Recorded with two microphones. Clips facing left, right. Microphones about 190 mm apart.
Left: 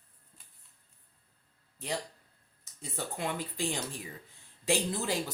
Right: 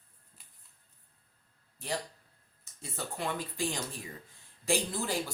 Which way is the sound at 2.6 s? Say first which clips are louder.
Left 2 dB; 15° left (ahead or behind).